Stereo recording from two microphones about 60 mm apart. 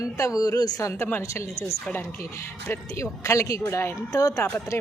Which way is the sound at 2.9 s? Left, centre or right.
Left.